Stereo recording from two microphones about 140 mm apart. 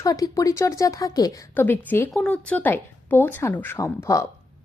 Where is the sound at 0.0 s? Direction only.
25° left (ahead or behind).